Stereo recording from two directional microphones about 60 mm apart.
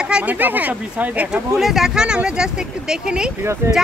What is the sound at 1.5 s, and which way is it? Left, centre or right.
Speech, centre.